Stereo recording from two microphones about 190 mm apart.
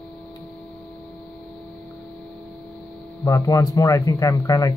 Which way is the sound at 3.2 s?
15° left (ahead or behind).